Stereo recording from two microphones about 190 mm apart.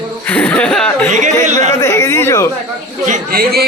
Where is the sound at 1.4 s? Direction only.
40° right (ahead or behind).